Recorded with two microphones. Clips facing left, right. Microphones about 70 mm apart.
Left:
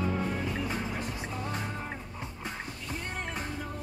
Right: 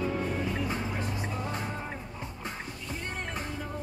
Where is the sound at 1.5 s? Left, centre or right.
Centre.